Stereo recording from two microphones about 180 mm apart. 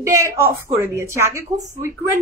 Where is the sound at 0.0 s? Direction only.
15° right (ahead or behind).